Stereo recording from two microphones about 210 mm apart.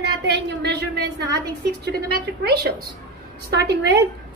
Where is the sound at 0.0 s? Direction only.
55° right (ahead or behind).